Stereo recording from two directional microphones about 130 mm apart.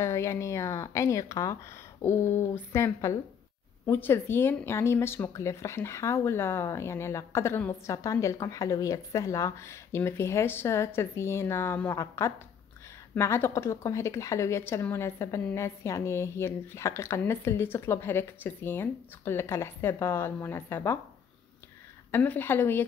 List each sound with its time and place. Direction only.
0.0 s speech: 20° left (ahead or behind)
22.1 s a woman's voice: 15° left (ahead or behind)